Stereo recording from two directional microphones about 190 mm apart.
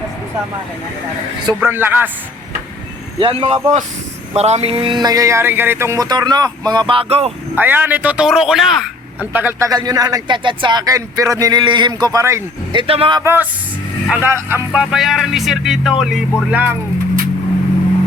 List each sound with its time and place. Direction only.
1.6 s speech: 10° right (ahead or behind)
3.2 s speech: 30° right (ahead or behind)
7.5 s speech: 10° right (ahead or behind)
12.9 s speech: 25° right (ahead or behind); by 16.7 s 10° right (ahead or behind)